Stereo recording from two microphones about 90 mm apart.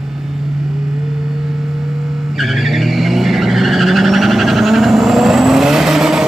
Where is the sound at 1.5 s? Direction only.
Centre (ahead or behind).